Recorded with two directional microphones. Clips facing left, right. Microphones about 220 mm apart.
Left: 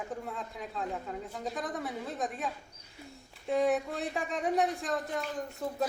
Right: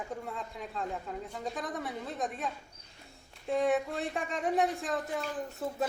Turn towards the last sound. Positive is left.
turn(degrees=0)  # may be behind; listen again after turning